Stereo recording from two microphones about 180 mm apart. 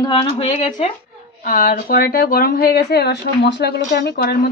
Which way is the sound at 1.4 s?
50° left (ahead or behind).